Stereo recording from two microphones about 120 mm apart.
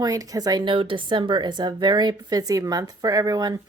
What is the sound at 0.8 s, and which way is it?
A woman's voice, 45° right (ahead or behind).